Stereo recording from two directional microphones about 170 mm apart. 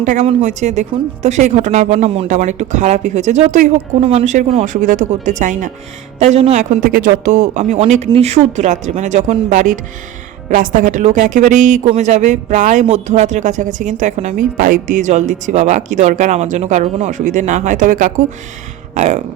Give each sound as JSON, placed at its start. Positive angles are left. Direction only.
{"t": 0.0, "sound": "a woman's voice", "side_deg": -45}